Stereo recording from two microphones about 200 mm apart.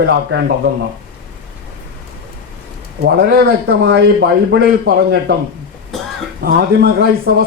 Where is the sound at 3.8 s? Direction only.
65° right (ahead or behind).